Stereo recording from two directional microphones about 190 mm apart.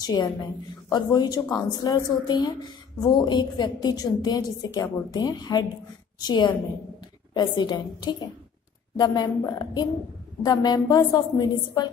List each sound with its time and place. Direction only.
0.0 s a woman's voice: 20° left (ahead or behind)